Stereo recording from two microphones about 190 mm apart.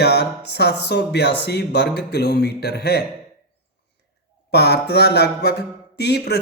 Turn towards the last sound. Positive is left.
turn(degrees=60)  # may be behind; listen again after turning